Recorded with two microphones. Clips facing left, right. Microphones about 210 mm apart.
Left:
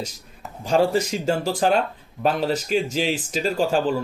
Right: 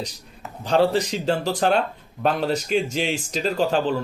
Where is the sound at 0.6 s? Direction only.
10° left (ahead or behind).